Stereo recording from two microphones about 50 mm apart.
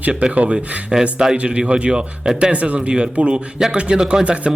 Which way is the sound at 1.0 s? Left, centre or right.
Centre.